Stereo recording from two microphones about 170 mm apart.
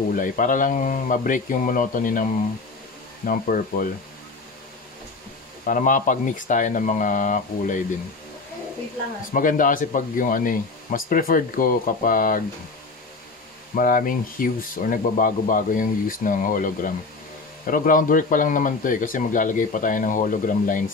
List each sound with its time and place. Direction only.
0.1 s speech: 50° left (ahead or behind)
3.3 s speech: 55° left (ahead or behind)
5.7 s speech: 50° left (ahead or behind)
9.3 s speech: 50° left (ahead or behind)
13.7 s speech: 55° left (ahead or behind)